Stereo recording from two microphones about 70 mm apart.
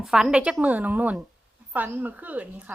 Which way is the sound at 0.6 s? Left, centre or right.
Right.